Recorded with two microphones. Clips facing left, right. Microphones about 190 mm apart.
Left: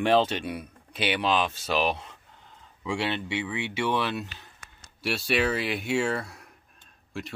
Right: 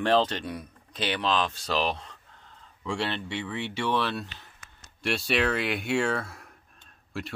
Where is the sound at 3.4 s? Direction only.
5° left (ahead or behind).